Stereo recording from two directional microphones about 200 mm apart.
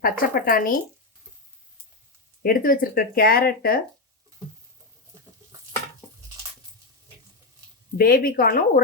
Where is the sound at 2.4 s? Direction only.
45° left (ahead or behind).